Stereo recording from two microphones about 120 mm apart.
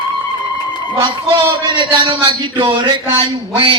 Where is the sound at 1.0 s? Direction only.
40° right (ahead or behind).